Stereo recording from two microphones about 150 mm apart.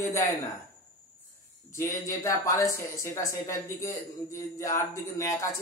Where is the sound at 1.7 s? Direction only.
20° left (ahead or behind).